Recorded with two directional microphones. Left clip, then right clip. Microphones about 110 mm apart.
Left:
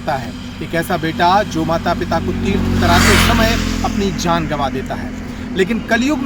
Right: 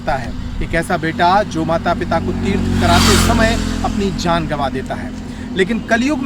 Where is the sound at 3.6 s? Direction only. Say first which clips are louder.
Left 1 dB; 85° right; by 4.2 s 55° right (ahead or behind).